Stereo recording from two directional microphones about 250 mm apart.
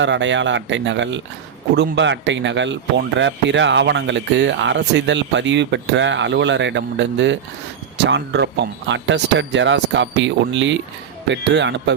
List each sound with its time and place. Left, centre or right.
0.0 s speech: right